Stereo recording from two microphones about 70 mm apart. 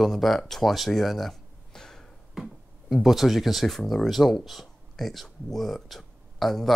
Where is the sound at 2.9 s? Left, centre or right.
Centre.